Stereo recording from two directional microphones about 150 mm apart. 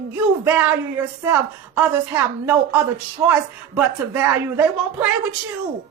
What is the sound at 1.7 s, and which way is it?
A man's voice, 10° right (ahead or behind).